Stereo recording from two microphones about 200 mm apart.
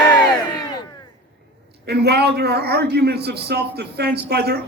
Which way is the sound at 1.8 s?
55° right (ahead or behind).